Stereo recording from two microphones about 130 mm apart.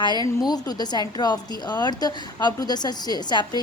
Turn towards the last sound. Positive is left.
turn(degrees=35)  # may be behind; listen again after turning